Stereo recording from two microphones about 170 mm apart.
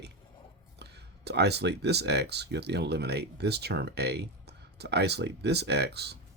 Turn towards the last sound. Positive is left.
turn(degrees=-75)  # may be behind; listen again after turning